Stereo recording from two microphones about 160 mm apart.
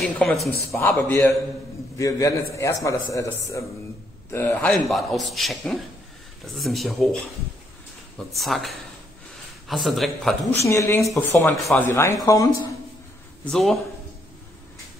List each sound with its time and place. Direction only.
0.0 s a man's voice: 10° left (ahead or behind)
0.7 s a man's voice: 15° left (ahead or behind)
4.7 s a man's voice: centre (ahead or behind)
8.4 s a man's voice: centre (ahead or behind)
10.7 s speech: 20° left (ahead or behind)
11.5 s a man's voice: centre (ahead or behind)
11.8 s speech: 15° left (ahead or behind)
13.5 s a man's voice: centre (ahead or behind)